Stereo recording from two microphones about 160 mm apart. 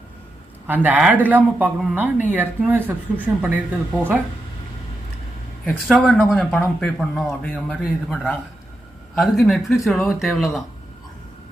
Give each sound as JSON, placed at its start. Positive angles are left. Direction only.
{"t": 0.7, "sound": "speech", "side_deg": -10}
{"t": 5.6, "sound": "speech", "side_deg": 5}
{"t": 7.5, "sound": "speech", "side_deg": -5}